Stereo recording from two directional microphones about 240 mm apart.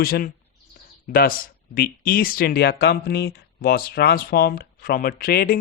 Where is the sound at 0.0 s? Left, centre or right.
Left.